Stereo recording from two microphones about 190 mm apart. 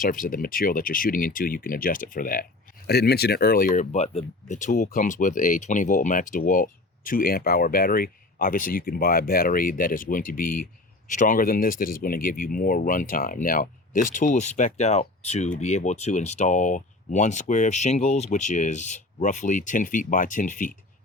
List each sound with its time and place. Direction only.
0.0 s speech: 45° left (ahead or behind)